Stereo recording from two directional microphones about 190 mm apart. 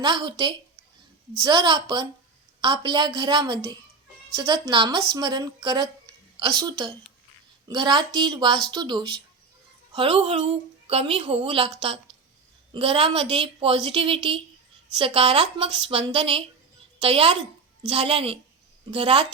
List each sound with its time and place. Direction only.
0.0 s a woman's voice: 25° right (ahead or behind)